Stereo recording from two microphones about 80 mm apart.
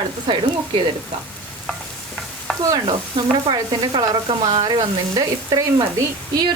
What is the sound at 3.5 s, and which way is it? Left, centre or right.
Speech, right.